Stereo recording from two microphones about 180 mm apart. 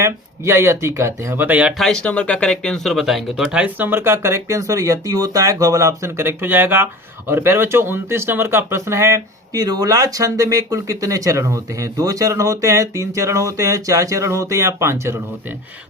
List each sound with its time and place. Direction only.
0.0 s speech: 15° right (ahead or behind)